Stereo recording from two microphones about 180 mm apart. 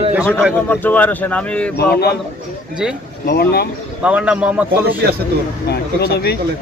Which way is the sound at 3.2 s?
60° left (ahead or behind).